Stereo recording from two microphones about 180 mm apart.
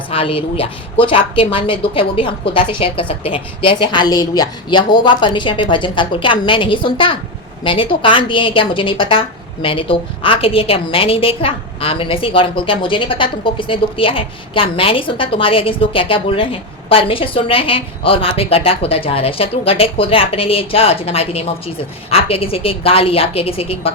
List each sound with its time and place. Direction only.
0.1 s a woman's voice: 30° left (ahead or behind)